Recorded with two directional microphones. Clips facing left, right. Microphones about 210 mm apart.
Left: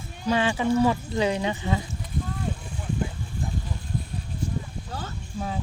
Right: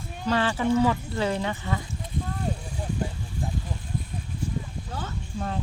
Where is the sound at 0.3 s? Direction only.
15° left (ahead or behind).